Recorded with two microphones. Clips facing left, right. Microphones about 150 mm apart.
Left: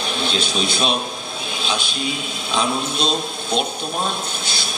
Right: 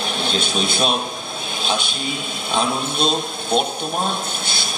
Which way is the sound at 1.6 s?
50° right (ahead or behind).